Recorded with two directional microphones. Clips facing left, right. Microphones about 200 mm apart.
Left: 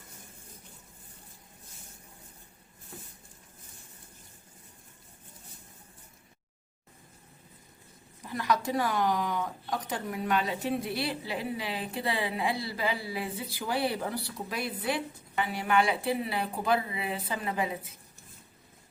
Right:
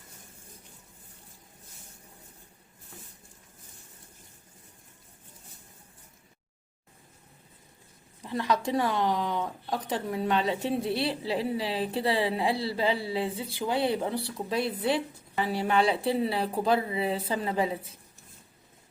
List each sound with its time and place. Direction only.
8.2 s speech: 25° right (ahead or behind)